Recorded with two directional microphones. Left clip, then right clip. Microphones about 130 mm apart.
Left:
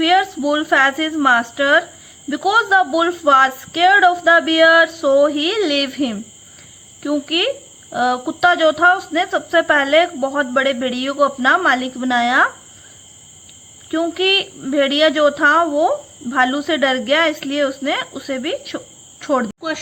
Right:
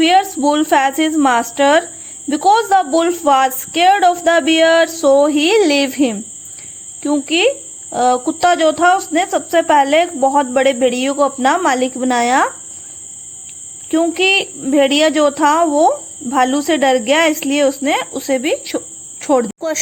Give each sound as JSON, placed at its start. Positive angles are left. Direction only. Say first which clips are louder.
{"t": 0.0, "sound": "speech", "louder": "right 3 dB", "side_deg": -40}
{"t": 7.0, "sound": "speech", "louder": "right 4 dB", "side_deg": -30}
{"t": 14.1, "sound": "a woman's voice", "louder": "even", "side_deg": -40}